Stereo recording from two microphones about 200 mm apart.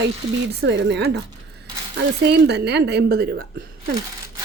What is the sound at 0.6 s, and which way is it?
Speech, 60° right (ahead or behind).